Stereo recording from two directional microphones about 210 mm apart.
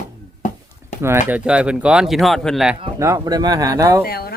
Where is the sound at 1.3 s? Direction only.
5° right (ahead or behind).